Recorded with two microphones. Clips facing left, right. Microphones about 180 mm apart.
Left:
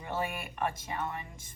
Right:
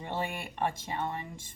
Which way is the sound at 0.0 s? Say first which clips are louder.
Even; 30° right (ahead or behind).